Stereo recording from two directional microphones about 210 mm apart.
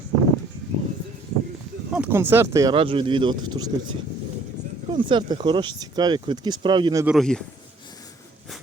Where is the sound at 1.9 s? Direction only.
10° right (ahead or behind).